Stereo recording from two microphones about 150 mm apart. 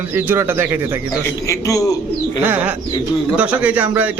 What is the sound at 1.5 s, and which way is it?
Speech, 20° left (ahead or behind).